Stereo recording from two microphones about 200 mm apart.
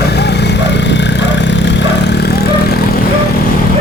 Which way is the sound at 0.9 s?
60° left (ahead or behind).